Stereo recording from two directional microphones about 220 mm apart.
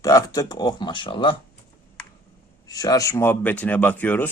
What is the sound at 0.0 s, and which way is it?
Speech, 15° left (ahead or behind).